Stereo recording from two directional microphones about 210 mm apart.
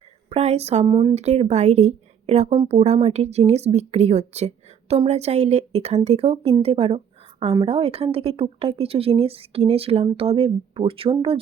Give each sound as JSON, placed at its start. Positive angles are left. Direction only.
{"t": 0.3, "sound": "speech", "side_deg": -30}